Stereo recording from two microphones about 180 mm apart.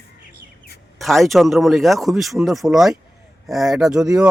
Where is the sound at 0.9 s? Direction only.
Centre (ahead or behind).